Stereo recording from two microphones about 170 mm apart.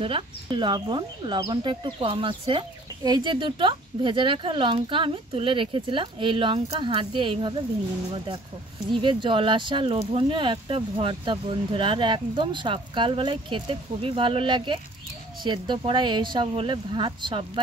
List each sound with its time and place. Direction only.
0.0 s speech: 30° right (ahead or behind)
8.9 s speech: 30° right (ahead or behind)